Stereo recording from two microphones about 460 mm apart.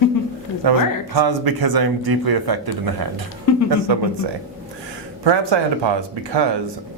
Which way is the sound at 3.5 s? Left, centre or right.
Left.